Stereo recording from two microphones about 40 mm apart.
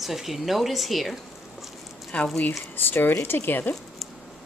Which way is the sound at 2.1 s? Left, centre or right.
Left.